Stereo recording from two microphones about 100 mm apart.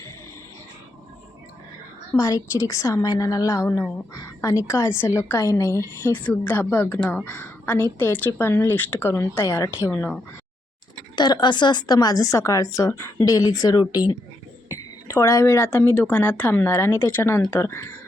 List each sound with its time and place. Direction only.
2.1 s a woman's voice: 35° left (ahead or behind)
11.1 s a woman's voice: 45° left (ahead or behind)
14.7 s a woman's voice: 30° left (ahead or behind)